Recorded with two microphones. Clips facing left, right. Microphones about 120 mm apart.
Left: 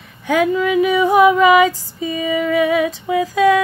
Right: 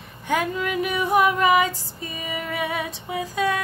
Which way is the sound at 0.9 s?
90° left.